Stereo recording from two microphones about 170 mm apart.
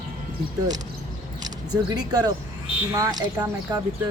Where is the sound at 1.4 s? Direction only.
25° right (ahead or behind).